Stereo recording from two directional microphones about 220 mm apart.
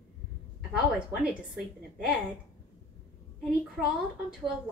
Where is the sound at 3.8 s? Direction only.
5° right (ahead or behind).